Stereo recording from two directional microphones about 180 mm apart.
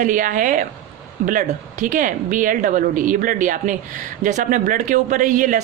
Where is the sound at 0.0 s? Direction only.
45° right (ahead or behind).